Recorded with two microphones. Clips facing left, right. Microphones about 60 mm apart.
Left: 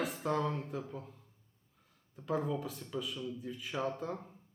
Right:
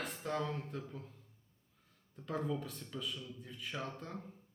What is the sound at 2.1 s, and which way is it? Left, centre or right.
Speech, centre.